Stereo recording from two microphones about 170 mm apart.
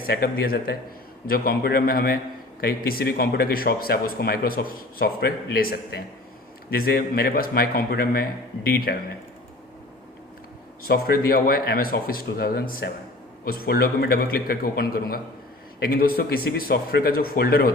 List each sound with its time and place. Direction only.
0.0 s speech: 65° left (ahead or behind)
10.8 s speech: 65° left (ahead or behind)